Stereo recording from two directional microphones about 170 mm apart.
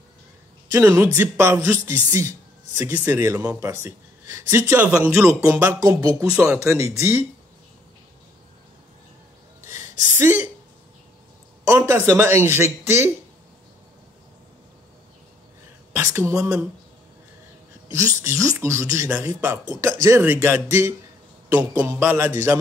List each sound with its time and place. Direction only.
0.7 s a man's voice: 15° right (ahead or behind)
6.1 s a man's voice: 10° right (ahead or behind)
9.6 s a sound: 15° right (ahead or behind)
11.6 s a man's voice: 15° right (ahead or behind)
15.9 s a man's voice: 15° right (ahead or behind)
17.9 s a man's voice: 15° right (ahead or behind)